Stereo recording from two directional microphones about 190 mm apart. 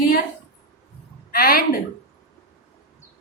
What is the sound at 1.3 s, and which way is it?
Speech, 50° left (ahead or behind).